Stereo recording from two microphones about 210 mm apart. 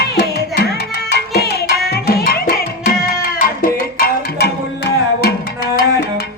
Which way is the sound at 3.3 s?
45° left (ahead or behind).